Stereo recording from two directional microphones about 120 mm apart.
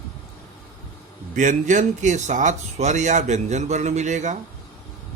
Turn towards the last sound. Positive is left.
turn(degrees=-85)